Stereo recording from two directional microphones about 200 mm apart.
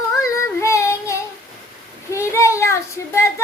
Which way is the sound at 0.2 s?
15° left (ahead or behind).